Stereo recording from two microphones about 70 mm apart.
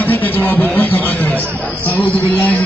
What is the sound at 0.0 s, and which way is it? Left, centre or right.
Speech, left.